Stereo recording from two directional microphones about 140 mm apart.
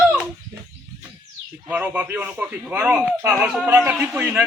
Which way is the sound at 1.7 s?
10° right (ahead or behind).